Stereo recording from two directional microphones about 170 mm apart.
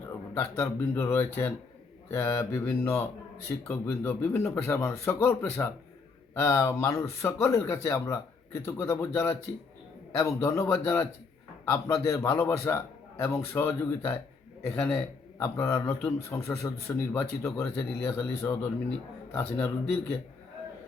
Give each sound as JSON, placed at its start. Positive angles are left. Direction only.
{"t": 0.3, "sound": "a man's voice", "side_deg": 15}